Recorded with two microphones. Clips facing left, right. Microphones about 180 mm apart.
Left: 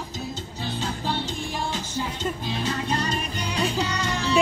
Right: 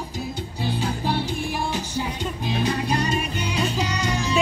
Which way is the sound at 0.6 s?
10° right (ahead or behind).